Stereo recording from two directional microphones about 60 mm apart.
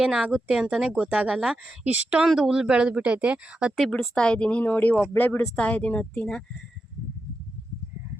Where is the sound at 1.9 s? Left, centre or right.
Right.